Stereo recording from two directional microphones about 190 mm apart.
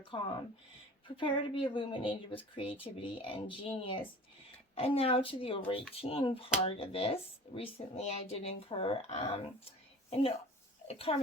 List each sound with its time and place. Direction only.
0.1 s speech: 25° left (ahead or behind)
10.8 s speech: 30° left (ahead or behind)